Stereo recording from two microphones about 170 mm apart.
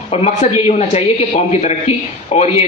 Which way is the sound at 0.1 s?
35° left (ahead or behind).